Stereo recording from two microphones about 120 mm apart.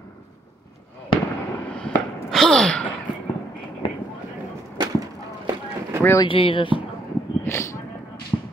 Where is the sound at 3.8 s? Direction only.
40° left (ahead or behind).